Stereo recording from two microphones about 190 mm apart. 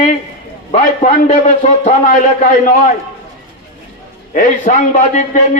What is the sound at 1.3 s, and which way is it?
Speech, 35° left (ahead or behind).